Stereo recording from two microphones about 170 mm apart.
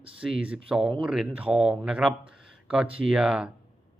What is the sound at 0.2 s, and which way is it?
Speech, 5° right (ahead or behind).